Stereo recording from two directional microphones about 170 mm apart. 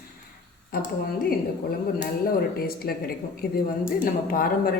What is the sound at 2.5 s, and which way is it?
A woman's voice, 60° left (ahead or behind).